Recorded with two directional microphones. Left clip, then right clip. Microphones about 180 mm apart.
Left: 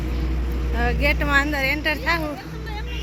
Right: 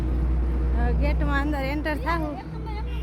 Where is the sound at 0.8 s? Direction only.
Centre (ahead or behind); by 2.2 s 25° right (ahead or behind).